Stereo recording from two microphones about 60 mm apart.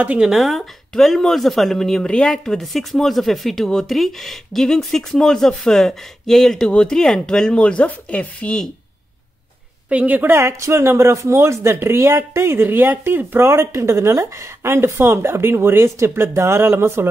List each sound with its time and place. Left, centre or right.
0.2 s a woman's voice: centre
9.8 s a woman's voice: right
10.6 s speech: right
13.4 s speech: right